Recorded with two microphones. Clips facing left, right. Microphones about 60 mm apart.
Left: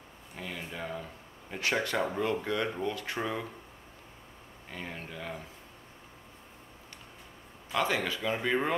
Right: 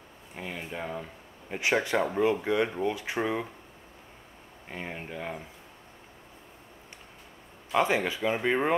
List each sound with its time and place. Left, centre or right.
0.4 s speech: centre
4.6 s speech: right
7.7 s speech: right